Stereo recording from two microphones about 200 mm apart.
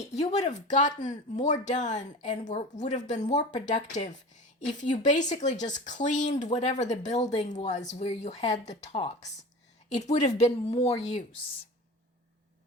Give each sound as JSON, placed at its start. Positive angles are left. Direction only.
{"t": 0.1, "sound": "speech", "side_deg": 35}